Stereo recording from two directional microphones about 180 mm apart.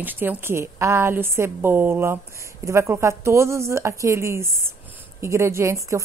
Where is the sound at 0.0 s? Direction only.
10° right (ahead or behind).